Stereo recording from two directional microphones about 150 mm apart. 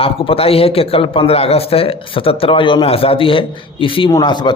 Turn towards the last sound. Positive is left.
turn(degrees=30)  # may be behind; listen again after turning